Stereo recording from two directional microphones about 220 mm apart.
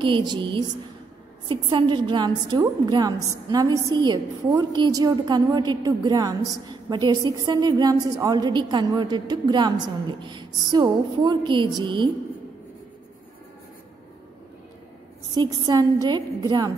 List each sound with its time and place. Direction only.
0.0 s a woman's voice: 20° right (ahead or behind)
15.3 s a woman's voice: 20° right (ahead or behind)